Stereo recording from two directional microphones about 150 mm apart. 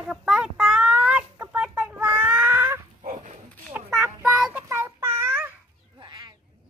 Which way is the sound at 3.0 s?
50° right (ahead or behind).